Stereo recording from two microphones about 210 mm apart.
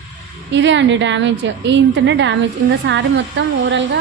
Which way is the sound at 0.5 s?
60° right (ahead or behind).